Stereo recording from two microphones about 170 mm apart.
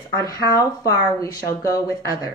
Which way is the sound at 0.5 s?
20° left (ahead or behind).